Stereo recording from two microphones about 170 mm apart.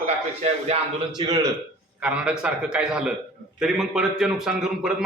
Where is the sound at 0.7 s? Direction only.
35° right (ahead or behind).